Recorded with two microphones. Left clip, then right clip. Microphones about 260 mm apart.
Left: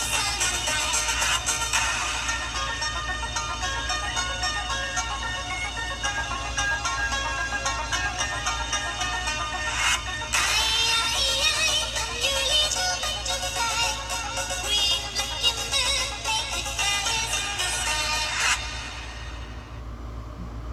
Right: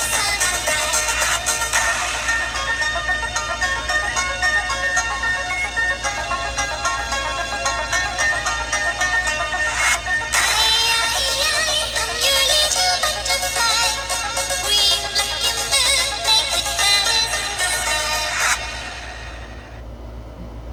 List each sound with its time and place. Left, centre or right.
0.1 s music: right
6.6 s music: right